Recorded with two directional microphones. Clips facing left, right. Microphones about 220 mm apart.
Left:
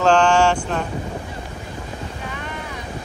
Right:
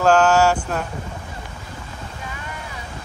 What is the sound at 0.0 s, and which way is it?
Wind noise, 5° right (ahead or behind).